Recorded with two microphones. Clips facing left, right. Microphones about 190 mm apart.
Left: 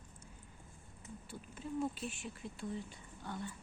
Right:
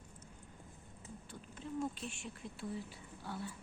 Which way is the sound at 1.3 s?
5° left (ahead or behind).